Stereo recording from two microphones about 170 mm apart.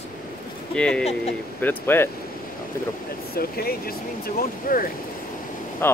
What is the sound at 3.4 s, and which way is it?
Speech, 65° left (ahead or behind).